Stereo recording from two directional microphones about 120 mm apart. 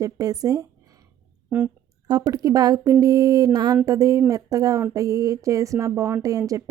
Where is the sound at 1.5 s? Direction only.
15° right (ahead or behind).